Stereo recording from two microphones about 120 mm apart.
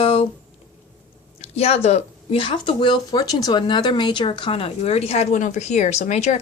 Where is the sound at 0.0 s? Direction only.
50° left (ahead or behind).